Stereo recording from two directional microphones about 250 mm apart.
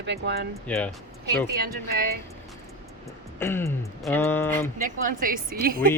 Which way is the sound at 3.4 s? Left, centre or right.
Centre.